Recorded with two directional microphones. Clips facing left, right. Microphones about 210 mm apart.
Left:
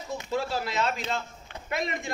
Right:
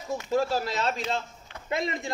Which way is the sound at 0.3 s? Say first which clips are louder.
Right 4 dB; 40° right (ahead or behind).